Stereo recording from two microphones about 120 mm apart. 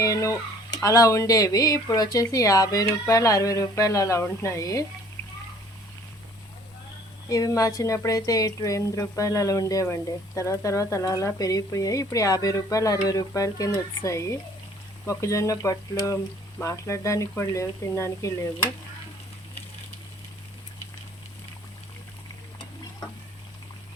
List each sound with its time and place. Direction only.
0.0 s speech: 25° left (ahead or behind)
7.3 s speech: 30° left (ahead or behind)